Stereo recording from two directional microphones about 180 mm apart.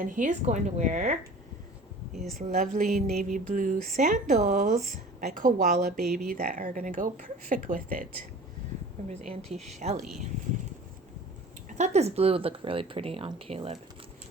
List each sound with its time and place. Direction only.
0.0 s speech: 45° right (ahead or behind)
2.1 s speech: centre (ahead or behind)
2.4 s speech: 40° right (ahead or behind)
9.0 s speech: 35° right (ahead or behind)
11.8 s speech: 35° right (ahead or behind)